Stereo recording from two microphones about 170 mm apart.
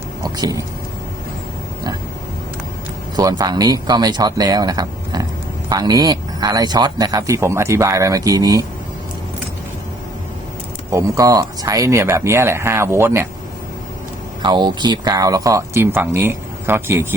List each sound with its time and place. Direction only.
0.2 s speech: 20° right (ahead or behind)
3.2 s speech: 20° right (ahead or behind)
10.9 s speech: 20° right (ahead or behind)
14.4 s speech: 25° right (ahead or behind)